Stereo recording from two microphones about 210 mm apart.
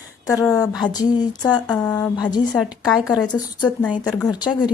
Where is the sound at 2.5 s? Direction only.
Centre (ahead or behind).